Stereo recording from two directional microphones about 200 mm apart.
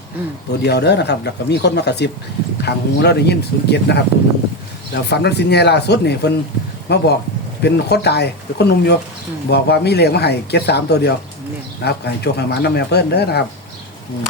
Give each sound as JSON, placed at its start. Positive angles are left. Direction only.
{"t": 0.6, "sound": "speech", "side_deg": 55}